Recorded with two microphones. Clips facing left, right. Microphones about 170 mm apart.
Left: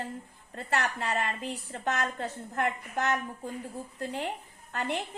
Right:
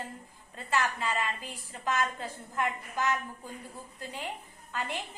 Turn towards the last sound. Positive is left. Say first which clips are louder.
# left 3 dB
turn(degrees=65)  # may be behind; listen again after turning